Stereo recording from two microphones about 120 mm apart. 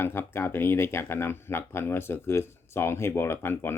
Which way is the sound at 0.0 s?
20° left (ahead or behind).